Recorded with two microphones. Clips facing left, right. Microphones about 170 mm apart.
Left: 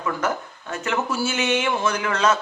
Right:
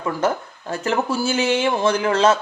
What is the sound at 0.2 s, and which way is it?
A man's voice, 30° right (ahead or behind).